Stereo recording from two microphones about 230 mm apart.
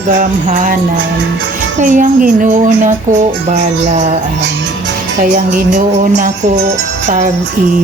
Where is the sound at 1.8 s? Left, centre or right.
Right.